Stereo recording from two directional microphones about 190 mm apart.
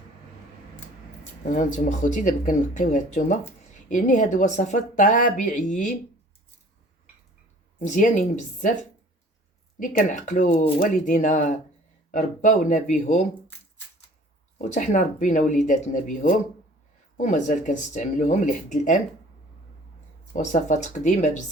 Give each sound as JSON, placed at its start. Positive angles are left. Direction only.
{"t": 1.5, "sound": "speech", "side_deg": 40}
{"t": 7.9, "sound": "speech", "side_deg": 45}
{"t": 10.0, "sound": "speech", "side_deg": 40}
{"t": 14.6, "sound": "speech", "side_deg": 40}
{"t": 17.2, "sound": "speech", "side_deg": 40}
{"t": 20.3, "sound": "speech", "side_deg": 40}